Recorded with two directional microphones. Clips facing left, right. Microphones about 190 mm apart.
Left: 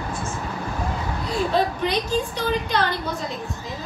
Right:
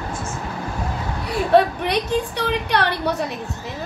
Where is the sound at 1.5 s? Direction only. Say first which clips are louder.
Right 8 dB; 65° right (ahead or behind).